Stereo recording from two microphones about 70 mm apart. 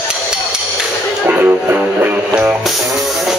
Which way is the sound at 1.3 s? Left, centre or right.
Right.